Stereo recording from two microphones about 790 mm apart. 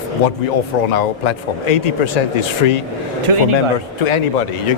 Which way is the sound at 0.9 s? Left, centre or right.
Left.